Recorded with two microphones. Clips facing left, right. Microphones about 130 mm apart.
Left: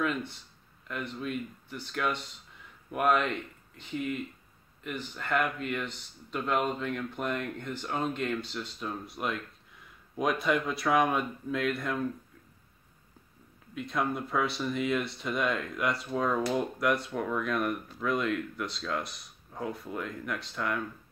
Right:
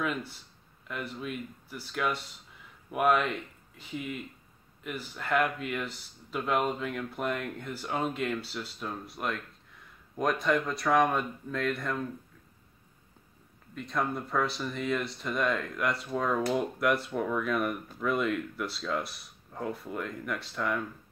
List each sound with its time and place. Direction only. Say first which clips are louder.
0.0 s speech: left 2 dB; 5° right (ahead or behind)
13.7 s speech: left 1 dB; centre (ahead or behind)